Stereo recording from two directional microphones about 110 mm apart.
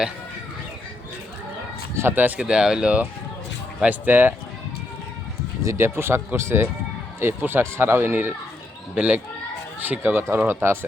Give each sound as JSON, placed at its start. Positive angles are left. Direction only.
{"t": 2.0, "sound": "speech", "side_deg": -20}
{"t": 5.6, "sound": "speech", "side_deg": -25}